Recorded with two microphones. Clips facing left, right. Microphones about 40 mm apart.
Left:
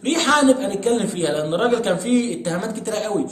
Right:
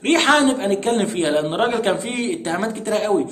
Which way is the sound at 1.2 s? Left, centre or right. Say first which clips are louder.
Right 2 dB; right.